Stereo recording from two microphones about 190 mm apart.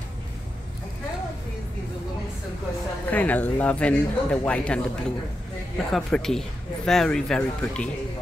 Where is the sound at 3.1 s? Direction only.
10° left (ahead or behind).